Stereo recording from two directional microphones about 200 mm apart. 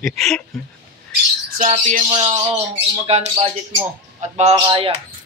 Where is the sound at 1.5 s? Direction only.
40° right (ahead or behind).